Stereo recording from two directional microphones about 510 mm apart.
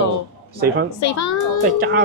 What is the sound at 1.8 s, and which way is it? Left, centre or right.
Speech, centre.